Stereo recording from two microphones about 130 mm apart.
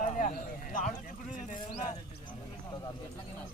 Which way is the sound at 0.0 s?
85° left.